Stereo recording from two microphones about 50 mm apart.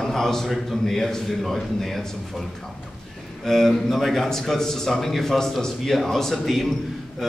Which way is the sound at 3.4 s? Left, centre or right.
Centre.